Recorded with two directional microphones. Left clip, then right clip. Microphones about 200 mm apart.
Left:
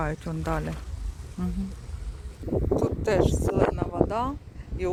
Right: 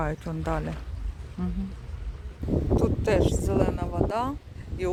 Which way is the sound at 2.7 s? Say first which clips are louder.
Even; centre (ahead or behind).